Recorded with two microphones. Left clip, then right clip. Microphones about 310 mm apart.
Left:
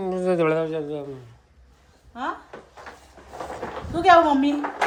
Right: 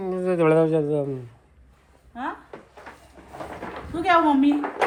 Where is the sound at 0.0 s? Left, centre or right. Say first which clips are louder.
Even; centre.